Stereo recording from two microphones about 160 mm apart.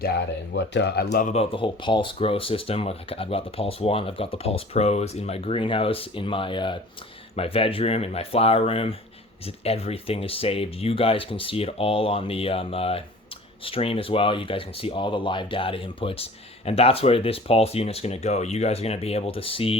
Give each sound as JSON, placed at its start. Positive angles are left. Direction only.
{"t": 0.7, "sound": "speech", "side_deg": 90}
{"t": 1.2, "sound": "speech", "side_deg": 40}